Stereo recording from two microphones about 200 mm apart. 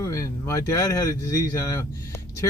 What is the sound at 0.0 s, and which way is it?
Speech, 15° left (ahead or behind).